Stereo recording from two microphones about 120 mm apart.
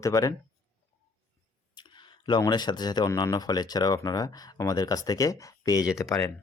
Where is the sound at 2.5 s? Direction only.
35° left (ahead or behind).